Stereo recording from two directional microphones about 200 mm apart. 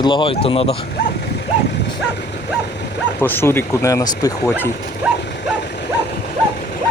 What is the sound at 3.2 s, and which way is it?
Speech, 10° left (ahead or behind).